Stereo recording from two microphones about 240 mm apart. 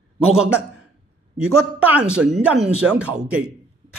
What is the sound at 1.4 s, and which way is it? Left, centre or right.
A man's voice, centre.